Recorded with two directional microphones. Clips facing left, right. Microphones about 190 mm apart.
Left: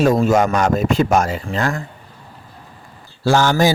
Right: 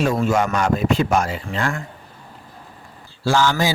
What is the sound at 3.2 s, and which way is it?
Speech, 45° left (ahead or behind).